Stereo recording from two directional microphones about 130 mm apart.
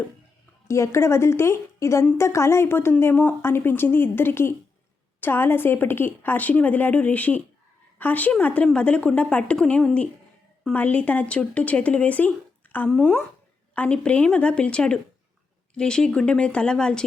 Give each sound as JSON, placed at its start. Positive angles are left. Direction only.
{"t": 0.7, "sound": "a woman's voice", "side_deg": 20}